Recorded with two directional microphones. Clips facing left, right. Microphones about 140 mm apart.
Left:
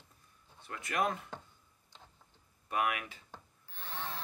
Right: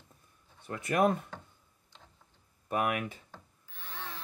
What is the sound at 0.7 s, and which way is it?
Speech, 30° right (ahead or behind).